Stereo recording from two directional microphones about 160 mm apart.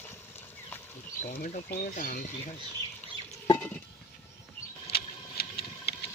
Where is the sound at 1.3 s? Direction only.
60° left (ahead or behind).